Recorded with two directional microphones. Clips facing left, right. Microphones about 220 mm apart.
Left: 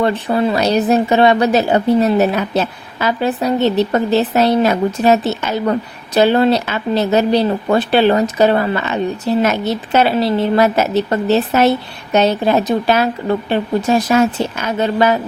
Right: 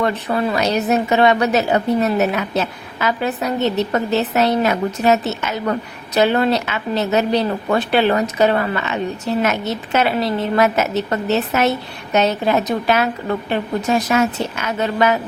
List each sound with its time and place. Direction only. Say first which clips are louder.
0.0 s speech: left 4 dB; 30° left (ahead or behind)